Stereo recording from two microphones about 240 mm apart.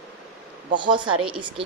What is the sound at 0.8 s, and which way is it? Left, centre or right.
Speech, centre.